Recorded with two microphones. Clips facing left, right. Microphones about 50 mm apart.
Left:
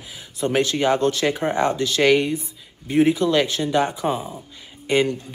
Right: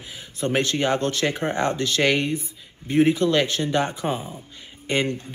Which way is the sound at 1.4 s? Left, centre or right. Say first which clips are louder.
Left 3 dB; centre.